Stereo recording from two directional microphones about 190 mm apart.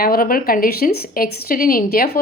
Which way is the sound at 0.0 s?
50° left (ahead or behind).